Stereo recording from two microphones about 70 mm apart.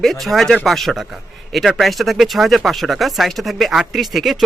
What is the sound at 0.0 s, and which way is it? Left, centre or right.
Speech, centre.